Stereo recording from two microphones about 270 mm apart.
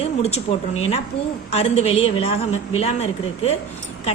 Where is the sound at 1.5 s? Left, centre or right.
Left.